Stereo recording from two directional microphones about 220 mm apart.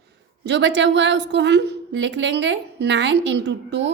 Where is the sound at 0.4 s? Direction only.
55° right (ahead or behind).